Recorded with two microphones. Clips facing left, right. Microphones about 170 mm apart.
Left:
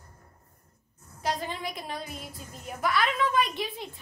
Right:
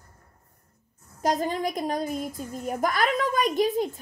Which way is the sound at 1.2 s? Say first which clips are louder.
Right 7 dB; 45° right (ahead or behind).